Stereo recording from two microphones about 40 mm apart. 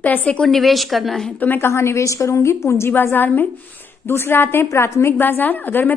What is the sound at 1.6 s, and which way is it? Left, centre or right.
Speech, left.